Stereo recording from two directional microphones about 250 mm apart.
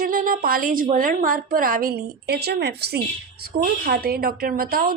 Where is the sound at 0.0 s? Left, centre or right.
Right.